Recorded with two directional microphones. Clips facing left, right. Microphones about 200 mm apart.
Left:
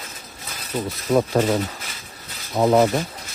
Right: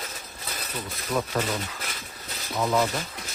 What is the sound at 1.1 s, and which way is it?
Speech, 35° left (ahead or behind).